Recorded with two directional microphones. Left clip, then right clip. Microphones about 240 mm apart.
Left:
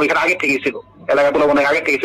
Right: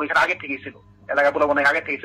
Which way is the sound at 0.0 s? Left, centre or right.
Left.